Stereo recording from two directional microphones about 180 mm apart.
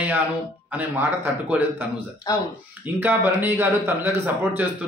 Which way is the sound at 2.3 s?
20° left (ahead or behind).